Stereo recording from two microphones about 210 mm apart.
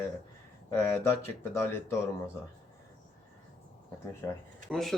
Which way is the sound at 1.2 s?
10° left (ahead or behind).